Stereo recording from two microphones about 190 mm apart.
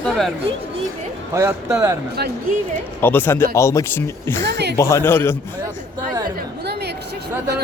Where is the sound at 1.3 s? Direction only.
15° right (ahead or behind).